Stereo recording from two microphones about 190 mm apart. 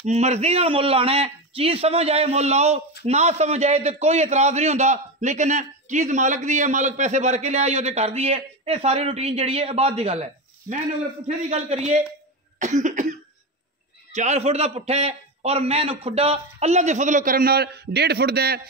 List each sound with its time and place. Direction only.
0.0 s a man's voice: 35° right (ahead or behind); by 18.6 s 55° right (ahead or behind)